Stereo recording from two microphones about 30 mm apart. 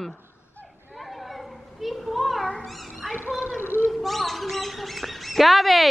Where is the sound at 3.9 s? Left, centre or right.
Centre.